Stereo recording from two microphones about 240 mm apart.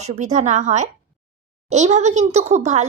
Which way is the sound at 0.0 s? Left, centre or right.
Right.